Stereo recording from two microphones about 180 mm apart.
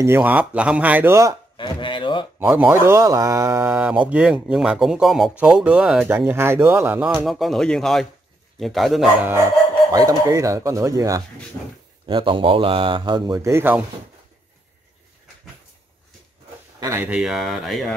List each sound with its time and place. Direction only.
0.0 s speech: 10° right (ahead or behind)
1.6 s chopping: 25° left (ahead or behind)
2.3 s speech: 10° right (ahead or behind)
9.9 s speech: 20° right (ahead or behind)
16.8 s speech: 10° right (ahead or behind)